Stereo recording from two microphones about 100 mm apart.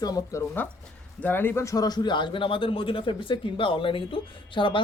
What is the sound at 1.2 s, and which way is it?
A man's voice, 20° left (ahead or behind).